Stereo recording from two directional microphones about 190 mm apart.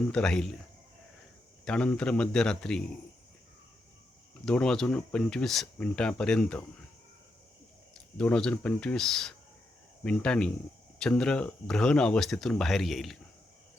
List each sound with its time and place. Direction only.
0.1 s speech: 5° left (ahead or behind)
1.6 s speech: 5° left (ahead or behind)
4.4 s speech: 5° left (ahead or behind)
8.2 s speech: 5° left (ahead or behind)